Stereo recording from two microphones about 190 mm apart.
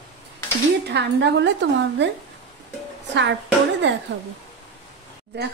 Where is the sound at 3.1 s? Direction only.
65° right (ahead or behind).